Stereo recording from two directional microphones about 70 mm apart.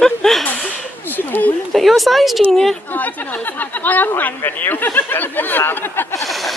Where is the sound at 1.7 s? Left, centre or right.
Centre.